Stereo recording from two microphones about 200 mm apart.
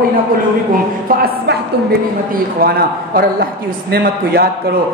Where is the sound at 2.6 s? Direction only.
50° right (ahead or behind).